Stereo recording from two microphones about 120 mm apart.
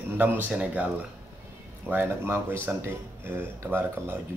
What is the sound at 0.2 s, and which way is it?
A man's voice, 15° right (ahead or behind).